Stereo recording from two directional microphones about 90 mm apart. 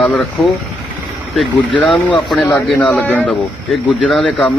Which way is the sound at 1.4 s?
Centre (ahead or behind).